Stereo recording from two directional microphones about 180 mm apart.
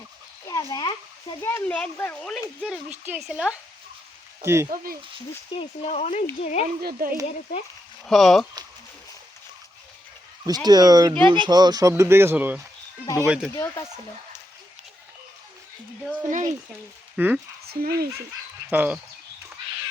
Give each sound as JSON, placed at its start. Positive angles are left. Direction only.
{"t": 0.4, "sound": "dog", "side_deg": 20}
{"t": 1.4, "sound": "speech", "side_deg": 15}
{"t": 4.4, "sound": "speech", "side_deg": -15}
{"t": 4.7, "sound": "speech", "side_deg": -55}
{"t": 5.5, "sound": "speech", "side_deg": 35}
{"t": 6.8, "sound": "speech", "side_deg": -55}
{"t": 8.0, "sound": "speech", "side_deg": 0}
{"t": 10.4, "sound": "speech", "side_deg": -20}
{"t": 13.5, "sound": "speech", "side_deg": 15}
{"t": 16.3, "sound": "speech", "side_deg": -45}
{"t": 17.2, "sound": "speech", "side_deg": -10}
{"t": 17.7, "sound": "speech", "side_deg": -60}
{"t": 18.7, "sound": "speech", "side_deg": -10}